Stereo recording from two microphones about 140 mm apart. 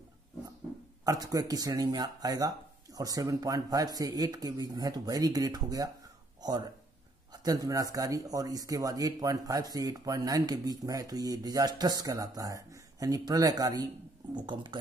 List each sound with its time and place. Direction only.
1.0 s speech: 25° right (ahead or behind)